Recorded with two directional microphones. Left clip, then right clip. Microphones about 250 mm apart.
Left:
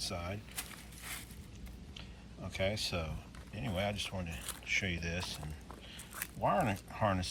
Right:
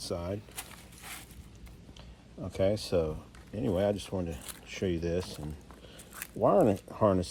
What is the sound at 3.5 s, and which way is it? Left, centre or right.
Speech, right.